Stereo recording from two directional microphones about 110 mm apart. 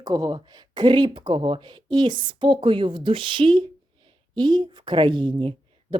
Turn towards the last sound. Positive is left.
turn(degrees=-50)  # may be behind; listen again after turning